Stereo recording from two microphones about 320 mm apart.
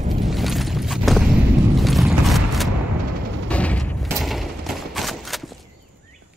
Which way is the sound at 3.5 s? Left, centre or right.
Centre.